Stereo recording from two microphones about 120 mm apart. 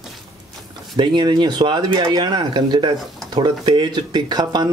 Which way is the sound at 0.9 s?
40° right (ahead or behind).